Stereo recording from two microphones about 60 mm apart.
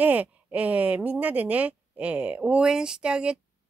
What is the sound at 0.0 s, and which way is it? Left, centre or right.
Speech, right.